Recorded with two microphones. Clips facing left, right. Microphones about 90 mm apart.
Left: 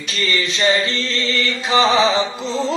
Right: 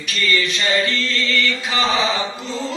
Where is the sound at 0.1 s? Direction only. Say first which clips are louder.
Right 1 dB; 25° left (ahead or behind).